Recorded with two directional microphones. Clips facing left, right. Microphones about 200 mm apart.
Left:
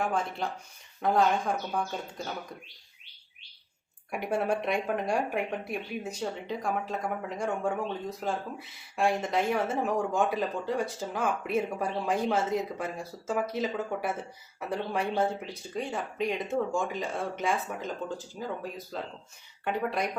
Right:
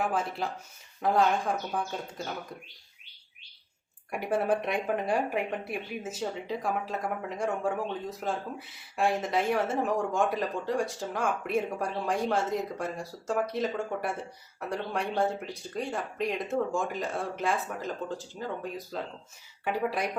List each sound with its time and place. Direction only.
0.0 s speech: 5° right (ahead or behind)
4.1 s speech: centre (ahead or behind)